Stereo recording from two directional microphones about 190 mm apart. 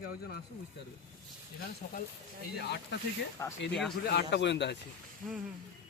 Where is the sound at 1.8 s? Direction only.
45° left (ahead or behind).